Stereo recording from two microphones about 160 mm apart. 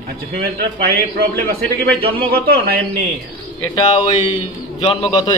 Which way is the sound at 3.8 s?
25° left (ahead or behind).